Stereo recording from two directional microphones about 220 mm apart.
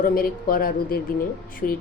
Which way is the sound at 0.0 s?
40° left (ahead or behind).